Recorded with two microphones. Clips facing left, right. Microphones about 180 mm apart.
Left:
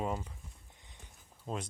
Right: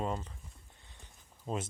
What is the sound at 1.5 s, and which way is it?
Speech, centre (ahead or behind).